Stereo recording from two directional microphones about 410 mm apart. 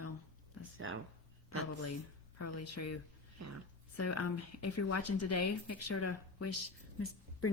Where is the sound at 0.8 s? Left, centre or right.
Right.